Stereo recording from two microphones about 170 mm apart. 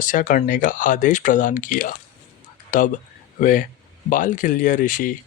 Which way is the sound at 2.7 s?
50° left (ahead or behind).